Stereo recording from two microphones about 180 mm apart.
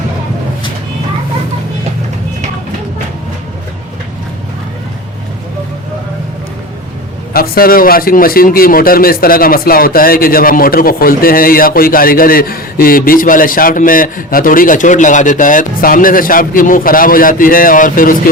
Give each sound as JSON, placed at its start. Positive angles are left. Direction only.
{"t": 7.3, "sound": "speech", "side_deg": 55}